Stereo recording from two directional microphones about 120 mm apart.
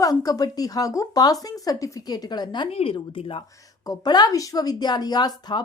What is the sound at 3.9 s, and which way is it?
Speech, 35° left (ahead or behind).